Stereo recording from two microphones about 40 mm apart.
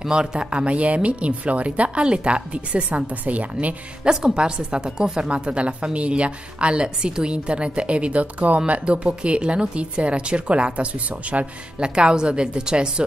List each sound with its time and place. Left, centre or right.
0.1 s speech: right
2.0 s a woman's voice: right
3.1 s speech: right
4.0 s a woman's voice: centre
11.8 s a woman's voice: right